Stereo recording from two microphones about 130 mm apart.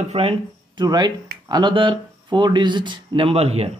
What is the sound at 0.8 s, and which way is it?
Speech, 35° right (ahead or behind).